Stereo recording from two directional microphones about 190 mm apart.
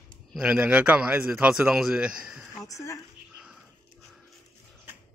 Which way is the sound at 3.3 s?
5° right (ahead or behind).